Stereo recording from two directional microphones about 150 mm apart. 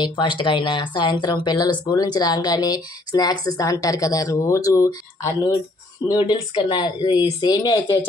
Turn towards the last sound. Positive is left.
turn(degrees=25)  # may be behind; listen again after turning